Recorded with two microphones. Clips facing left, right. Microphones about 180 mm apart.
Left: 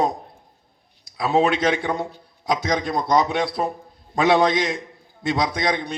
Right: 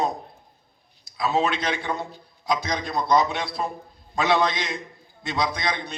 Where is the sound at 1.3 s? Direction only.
50° left (ahead or behind).